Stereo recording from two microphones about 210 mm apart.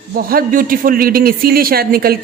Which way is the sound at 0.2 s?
45° right (ahead or behind).